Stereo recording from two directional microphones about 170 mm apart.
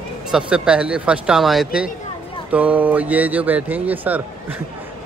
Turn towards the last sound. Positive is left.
turn(degrees=-10)  # may be behind; listen again after turning